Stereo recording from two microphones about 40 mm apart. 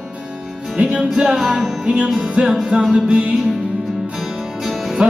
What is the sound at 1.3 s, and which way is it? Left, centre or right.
Music, centre.